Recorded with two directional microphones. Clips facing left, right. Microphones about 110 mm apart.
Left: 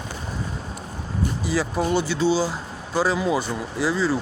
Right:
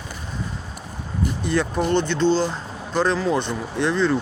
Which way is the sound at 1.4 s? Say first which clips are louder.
Right 2 dB; 5° left (ahead or behind).